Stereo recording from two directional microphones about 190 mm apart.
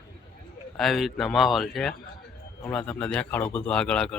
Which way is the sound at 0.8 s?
Centre (ahead or behind).